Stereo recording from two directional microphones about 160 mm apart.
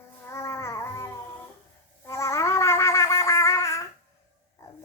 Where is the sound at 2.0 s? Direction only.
20° left (ahead or behind).